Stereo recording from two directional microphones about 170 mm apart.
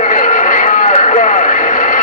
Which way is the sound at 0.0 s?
50° left (ahead or behind).